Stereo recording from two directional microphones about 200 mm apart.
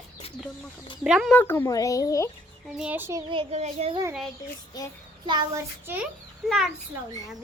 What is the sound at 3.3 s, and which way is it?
Speech, 30° right (ahead or behind).